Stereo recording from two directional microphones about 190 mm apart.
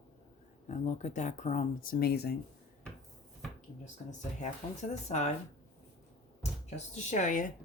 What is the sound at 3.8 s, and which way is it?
Speech, 40° left (ahead or behind).